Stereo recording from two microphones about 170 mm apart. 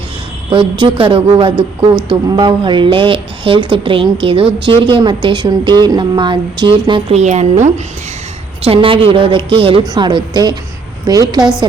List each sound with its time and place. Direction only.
0.5 s a woman's voice: 30° right (ahead or behind)
11.3 s a woman's voice: 5° right (ahead or behind)